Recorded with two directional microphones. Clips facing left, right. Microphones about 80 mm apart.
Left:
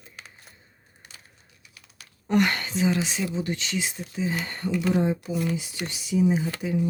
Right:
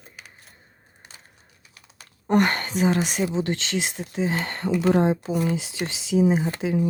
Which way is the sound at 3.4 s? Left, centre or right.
Right.